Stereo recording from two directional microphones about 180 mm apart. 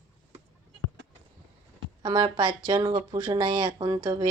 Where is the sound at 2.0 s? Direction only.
25° right (ahead or behind).